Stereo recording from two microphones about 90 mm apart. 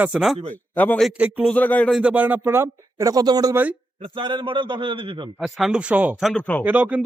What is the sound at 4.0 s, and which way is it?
A man's voice, 65° right (ahead or behind).